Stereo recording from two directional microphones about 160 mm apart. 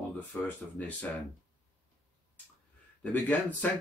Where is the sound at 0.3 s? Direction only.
10° left (ahead or behind).